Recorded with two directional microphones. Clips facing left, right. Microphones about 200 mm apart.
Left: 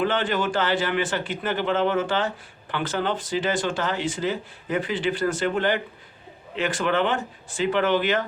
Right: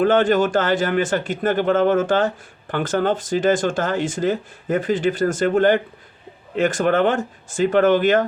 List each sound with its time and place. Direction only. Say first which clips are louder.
0.0 s a man's voice: right 8 dB; 45° right (ahead or behind)